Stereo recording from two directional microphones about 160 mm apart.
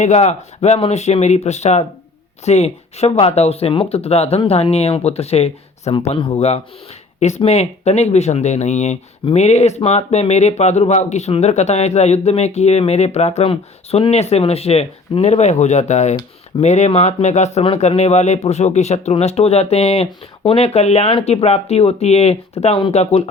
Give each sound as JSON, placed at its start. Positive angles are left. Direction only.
{"t": 0.0, "sound": "speech", "side_deg": 45}